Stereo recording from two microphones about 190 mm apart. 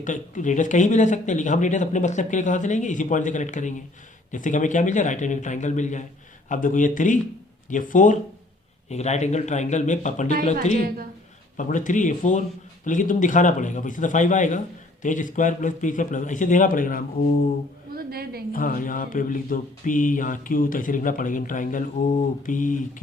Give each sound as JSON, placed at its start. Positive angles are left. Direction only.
{"t": 0.0, "sound": "speech", "side_deg": 40}
{"t": 6.5, "sound": "mantra", "side_deg": 45}
{"t": 8.9, "sound": "speech", "side_deg": 35}
{"t": 12.8, "sound": "mantra", "side_deg": 45}
{"t": 17.9, "sound": "a woman's voice", "side_deg": -55}
{"t": 18.5, "sound": "mantra", "side_deg": 45}